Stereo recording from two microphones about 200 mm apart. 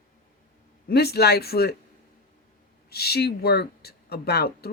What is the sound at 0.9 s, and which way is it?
Speech, 55° left (ahead or behind).